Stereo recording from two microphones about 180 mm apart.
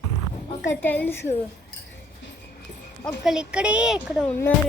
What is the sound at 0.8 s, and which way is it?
Speech, 10° left (ahead or behind).